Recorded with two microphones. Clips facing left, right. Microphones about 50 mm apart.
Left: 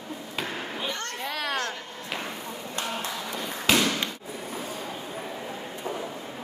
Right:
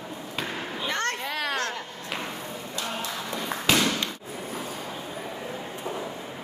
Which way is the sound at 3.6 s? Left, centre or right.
Centre.